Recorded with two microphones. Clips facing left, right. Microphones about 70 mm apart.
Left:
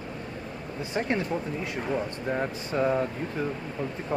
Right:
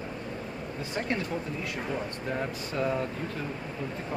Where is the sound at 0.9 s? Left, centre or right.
Left.